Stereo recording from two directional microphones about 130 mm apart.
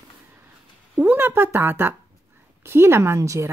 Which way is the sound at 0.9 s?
15° right (ahead or behind).